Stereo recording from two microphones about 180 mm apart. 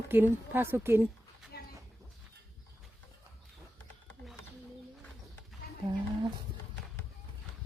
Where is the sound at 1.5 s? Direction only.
60° left (ahead or behind).